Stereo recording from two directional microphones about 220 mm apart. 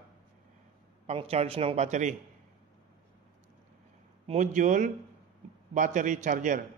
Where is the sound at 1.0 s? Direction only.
25° right (ahead or behind).